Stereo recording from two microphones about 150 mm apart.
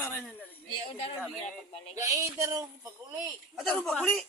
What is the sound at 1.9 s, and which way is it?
A woman's voice, 20° right (ahead or behind).